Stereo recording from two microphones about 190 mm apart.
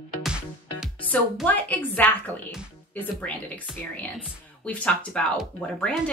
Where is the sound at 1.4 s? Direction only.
10° left (ahead or behind).